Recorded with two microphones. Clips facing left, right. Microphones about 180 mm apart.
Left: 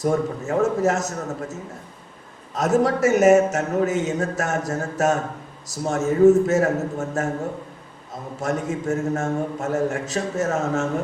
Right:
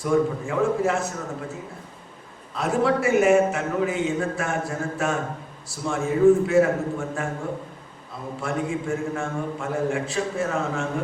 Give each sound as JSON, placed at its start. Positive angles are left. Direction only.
{"t": 0.0, "sound": "a man's voice", "side_deg": 40}
{"t": 2.6, "sound": "a man's voice", "side_deg": 40}
{"t": 8.4, "sound": "a man's voice", "side_deg": 40}